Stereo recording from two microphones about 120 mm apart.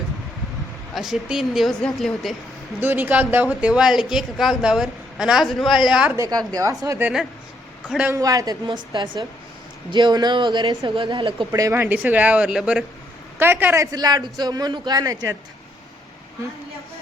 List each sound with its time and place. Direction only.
0.9 s a woman's voice: 5° right (ahead or behind)
2.8 s a woman's voice: 15° right (ahead or behind)
6.1 s a woman's voice: 30° right (ahead or behind)
7.9 s speech: 10° right (ahead or behind)
8.1 s speech: 30° right (ahead or behind)
11.7 s speech: 15° right (ahead or behind)
13.4 s a woman's voice: 15° right (ahead or behind)
13.9 s speech: 35° right (ahead or behind)